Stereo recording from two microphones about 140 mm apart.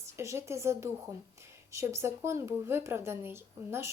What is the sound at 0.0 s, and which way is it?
Speech, 20° right (ahead or behind).